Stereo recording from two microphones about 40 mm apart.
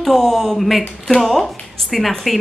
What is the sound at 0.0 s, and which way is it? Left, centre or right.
A woman's voice, centre.